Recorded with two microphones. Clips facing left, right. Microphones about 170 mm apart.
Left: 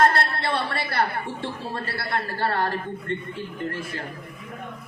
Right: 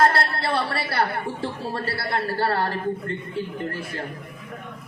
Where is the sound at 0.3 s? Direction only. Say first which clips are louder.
Right 2 dB; 35° right (ahead or behind).